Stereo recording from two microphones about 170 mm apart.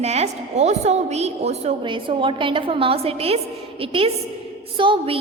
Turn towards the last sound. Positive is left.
turn(degrees=-30)  # may be behind; listen again after turning